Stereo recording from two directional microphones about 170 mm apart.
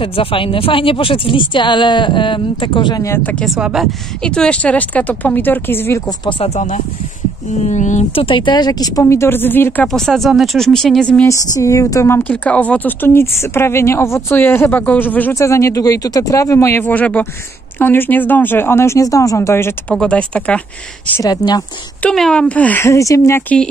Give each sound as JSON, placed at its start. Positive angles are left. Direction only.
{"t": 0.0, "sound": "speech", "side_deg": 30}
{"t": 3.4, "sound": "a woman's voice", "side_deg": -5}
{"t": 6.2, "sound": "a woman's voice", "side_deg": 35}
{"t": 11.2, "sound": "a woman's voice", "side_deg": 20}
{"t": 21.2, "sound": "speech", "side_deg": 25}
{"t": 22.0, "sound": "a woman's voice", "side_deg": 5}